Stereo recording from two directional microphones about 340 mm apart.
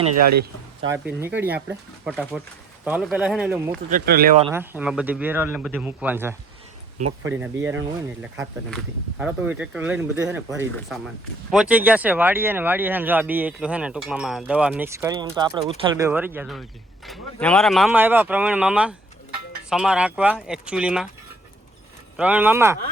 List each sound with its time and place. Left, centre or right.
0.0 s speech: right
0.9 s speech: centre
3.8 s speech: right
4.4 s speech: centre
22.2 s speech: centre